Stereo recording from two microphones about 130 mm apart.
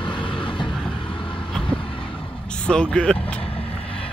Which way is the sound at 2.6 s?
5° left (ahead or behind).